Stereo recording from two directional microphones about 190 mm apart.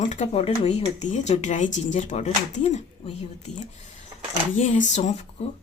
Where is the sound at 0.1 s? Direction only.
35° left (ahead or behind).